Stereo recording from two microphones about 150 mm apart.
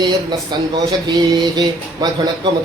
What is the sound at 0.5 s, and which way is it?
Speech, 30° right (ahead or behind).